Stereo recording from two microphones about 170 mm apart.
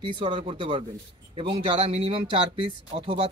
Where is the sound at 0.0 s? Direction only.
30° right (ahead or behind).